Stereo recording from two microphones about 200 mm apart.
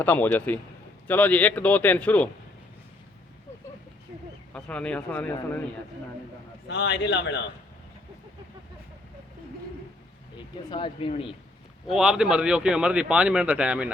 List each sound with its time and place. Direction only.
0.0 s a man's voice: 10° left (ahead or behind)
4.5 s a man's voice: 5° left (ahead or behind)
6.7 s a man's voice: 60° left (ahead or behind)
10.3 s speech: 25° left (ahead or behind)
11.9 s speech: 5° right (ahead or behind)